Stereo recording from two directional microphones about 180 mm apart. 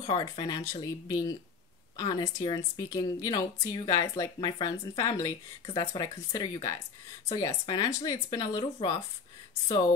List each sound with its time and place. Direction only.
0.0 s a woman's voice: 25° left (ahead or behind)